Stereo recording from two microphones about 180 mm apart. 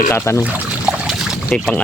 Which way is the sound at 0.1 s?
15° left (ahead or behind).